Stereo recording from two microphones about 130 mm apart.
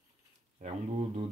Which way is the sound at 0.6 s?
55° right (ahead or behind).